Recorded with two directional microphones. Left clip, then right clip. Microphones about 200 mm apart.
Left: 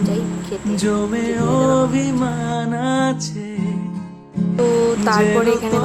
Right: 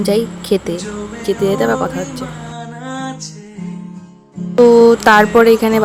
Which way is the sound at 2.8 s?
50° left (ahead or behind).